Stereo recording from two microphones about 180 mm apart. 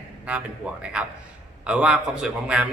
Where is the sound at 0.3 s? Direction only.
5° right (ahead or behind).